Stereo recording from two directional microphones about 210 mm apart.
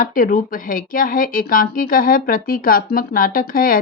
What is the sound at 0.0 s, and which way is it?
Speech, 40° left (ahead or behind).